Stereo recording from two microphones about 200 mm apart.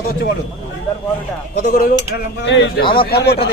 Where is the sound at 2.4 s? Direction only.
65° left (ahead or behind).